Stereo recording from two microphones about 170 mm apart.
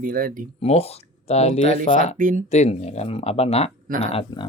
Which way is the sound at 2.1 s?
55° right (ahead or behind).